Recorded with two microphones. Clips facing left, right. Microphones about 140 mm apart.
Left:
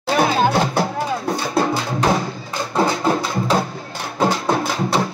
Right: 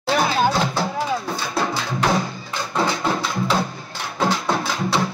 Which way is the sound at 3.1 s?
40° left (ahead or behind).